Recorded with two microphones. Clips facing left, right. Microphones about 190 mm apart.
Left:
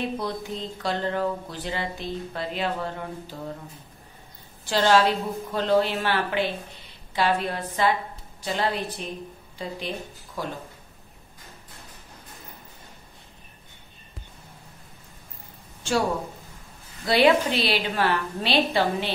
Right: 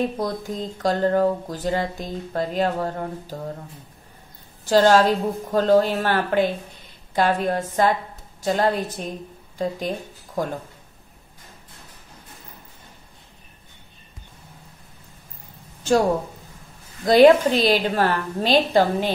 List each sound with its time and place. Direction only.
0.0 s speech: 45° right (ahead or behind)
4.6 s speech: 45° right (ahead or behind)
17.0 s speech: 45° right (ahead or behind)